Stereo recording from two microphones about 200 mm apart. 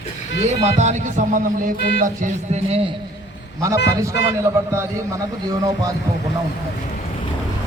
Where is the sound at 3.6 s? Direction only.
15° right (ahead or behind).